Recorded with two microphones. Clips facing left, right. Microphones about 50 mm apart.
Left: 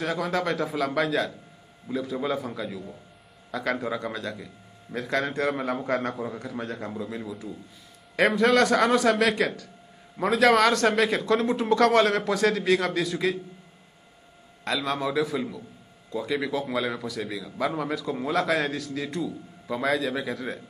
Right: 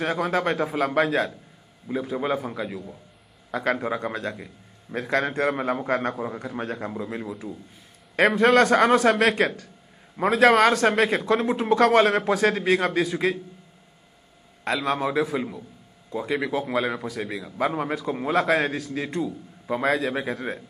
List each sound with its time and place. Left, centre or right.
0.0 s a man's voice: right; by 2.8 s centre
3.8 s a man's voice: right
6.1 s a man's voice: right
6.4 s a man's voice: right
10.1 s a man's voice: right
14.9 s a man's voice: right